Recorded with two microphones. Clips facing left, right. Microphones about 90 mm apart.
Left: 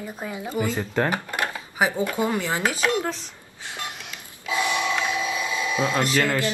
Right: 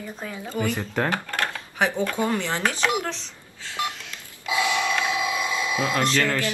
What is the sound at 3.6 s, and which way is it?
Telephone dialing, 20° left (ahead or behind).